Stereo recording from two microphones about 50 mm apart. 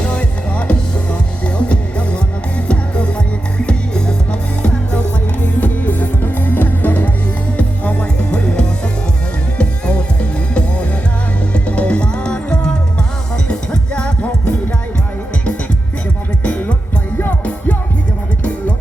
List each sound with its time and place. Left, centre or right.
0.0 s music: left
16.4 s music: left